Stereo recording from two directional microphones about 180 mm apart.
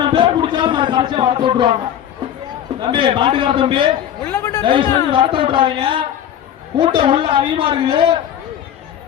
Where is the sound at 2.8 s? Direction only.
30° right (ahead or behind).